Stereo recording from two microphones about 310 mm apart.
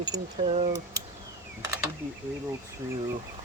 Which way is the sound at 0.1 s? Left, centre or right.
Centre.